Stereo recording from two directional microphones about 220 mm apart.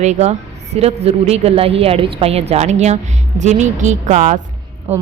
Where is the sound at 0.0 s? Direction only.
30° right (ahead or behind).